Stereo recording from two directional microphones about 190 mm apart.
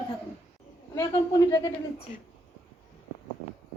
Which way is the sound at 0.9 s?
20° left (ahead or behind).